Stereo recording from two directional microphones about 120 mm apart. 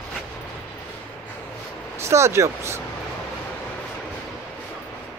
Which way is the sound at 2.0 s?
25° right (ahead or behind).